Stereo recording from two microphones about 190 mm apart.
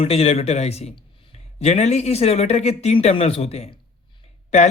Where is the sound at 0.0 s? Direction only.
30° left (ahead or behind).